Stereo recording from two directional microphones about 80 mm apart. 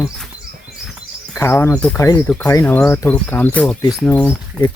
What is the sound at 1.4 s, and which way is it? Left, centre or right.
Speech, left.